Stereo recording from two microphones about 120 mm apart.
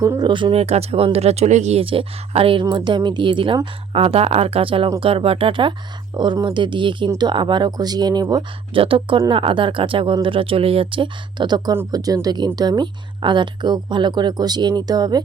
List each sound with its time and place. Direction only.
0.0 s speech: 30° right (ahead or behind)
0.5 s speech: 60° right (ahead or behind)
1.8 s speech: 50° right (ahead or behind)
8.8 s speech: 50° right (ahead or behind); by 15.2 s 35° right (ahead or behind)